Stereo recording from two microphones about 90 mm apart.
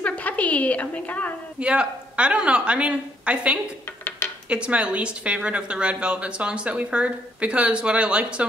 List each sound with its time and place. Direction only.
0.0 s a woman's voice: 15° left (ahead or behind)
1.6 s a woman's voice: 10° right (ahead or behind)